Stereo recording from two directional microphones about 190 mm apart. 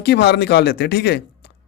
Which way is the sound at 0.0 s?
60° left (ahead or behind).